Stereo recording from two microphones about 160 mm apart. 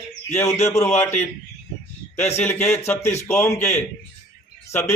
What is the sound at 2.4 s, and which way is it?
A man's voice, 5° left (ahead or behind).